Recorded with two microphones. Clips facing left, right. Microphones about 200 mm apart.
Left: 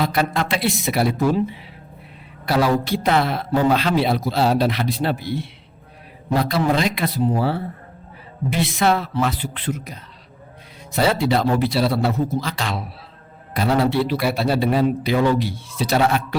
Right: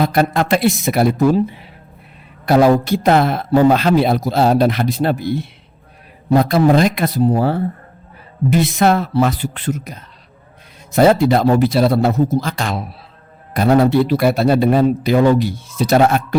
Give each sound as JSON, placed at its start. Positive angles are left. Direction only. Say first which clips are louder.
{"t": 0.0, "sound": "speech", "louder": "right 5 dB", "side_deg": -50}